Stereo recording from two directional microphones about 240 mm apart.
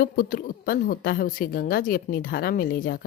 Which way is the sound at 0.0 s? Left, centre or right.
Left.